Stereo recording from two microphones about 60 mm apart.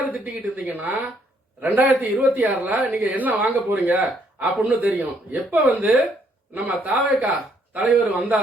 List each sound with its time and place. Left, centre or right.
0.1 s speech: right